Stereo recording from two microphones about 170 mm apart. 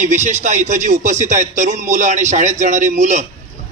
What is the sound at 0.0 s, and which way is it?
A man's voice, 45° right (ahead or behind).